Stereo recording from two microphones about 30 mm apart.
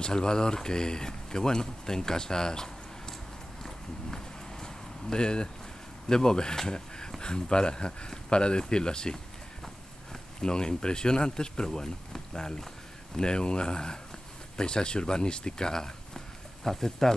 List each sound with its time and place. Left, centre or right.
0.0 s speech: left
3.6 s walk: centre
5.1 s speech: left
10.4 s speech: left
13.2 s speech: left; by 17.1 s centre